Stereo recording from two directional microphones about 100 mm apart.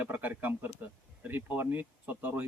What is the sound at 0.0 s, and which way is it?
Speech, 15° right (ahead or behind).